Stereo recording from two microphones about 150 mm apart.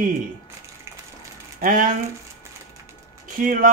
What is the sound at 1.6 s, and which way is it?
Speech, 65° right (ahead or behind).